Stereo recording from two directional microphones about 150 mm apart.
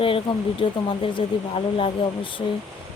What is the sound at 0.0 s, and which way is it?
Speech, 35° left (ahead or behind).